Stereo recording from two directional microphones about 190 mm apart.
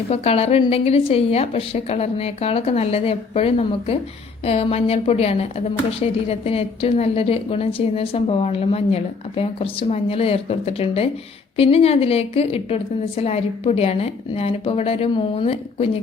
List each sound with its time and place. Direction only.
0.1 s a woman's voice: 35° left (ahead or behind)